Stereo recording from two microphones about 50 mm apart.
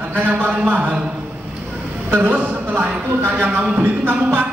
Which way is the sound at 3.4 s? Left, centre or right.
Right.